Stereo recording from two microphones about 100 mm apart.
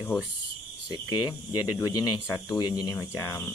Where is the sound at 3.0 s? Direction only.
30° left (ahead or behind).